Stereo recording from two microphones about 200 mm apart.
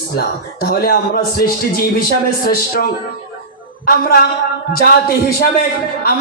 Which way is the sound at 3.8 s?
50° left (ahead or behind).